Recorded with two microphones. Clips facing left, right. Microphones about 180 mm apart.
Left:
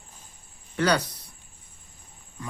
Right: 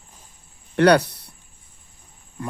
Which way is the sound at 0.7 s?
65° right (ahead or behind).